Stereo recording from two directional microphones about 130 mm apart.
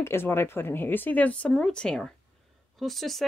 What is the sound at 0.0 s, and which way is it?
Speech, 20° left (ahead or behind).